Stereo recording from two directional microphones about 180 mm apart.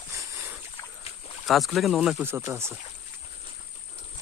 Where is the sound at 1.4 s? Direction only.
Centre (ahead or behind).